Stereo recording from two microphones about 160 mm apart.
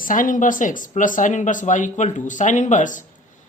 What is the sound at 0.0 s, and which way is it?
A man's voice, 55° left (ahead or behind).